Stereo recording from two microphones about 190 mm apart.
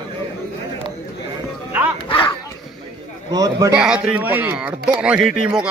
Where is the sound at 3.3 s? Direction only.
20° right (ahead or behind).